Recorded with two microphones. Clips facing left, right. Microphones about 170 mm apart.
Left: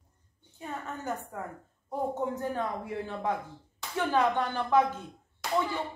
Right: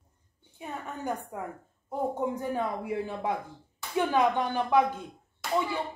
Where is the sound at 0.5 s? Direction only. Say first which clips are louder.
Even; 15° right (ahead or behind).